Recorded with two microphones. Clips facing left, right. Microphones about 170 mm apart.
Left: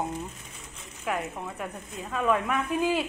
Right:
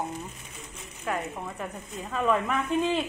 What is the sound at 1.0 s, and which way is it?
A woman's voice, centre (ahead or behind).